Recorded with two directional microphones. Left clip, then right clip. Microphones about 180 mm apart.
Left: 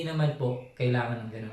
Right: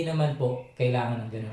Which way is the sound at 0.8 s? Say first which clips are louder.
Right 3 dB; 15° right (ahead or behind).